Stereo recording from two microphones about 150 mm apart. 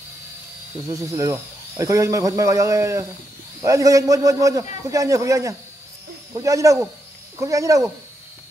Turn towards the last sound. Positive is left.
turn(degrees=-20)  # may be behind; listen again after turning